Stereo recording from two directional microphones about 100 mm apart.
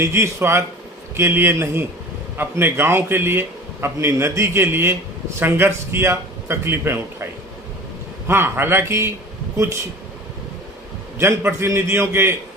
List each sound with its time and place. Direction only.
0.0 s a man's voice: 25° right (ahead or behind)
8.3 s a man's voice: 25° right (ahead or behind)
11.2 s a man's voice: 25° right (ahead or behind)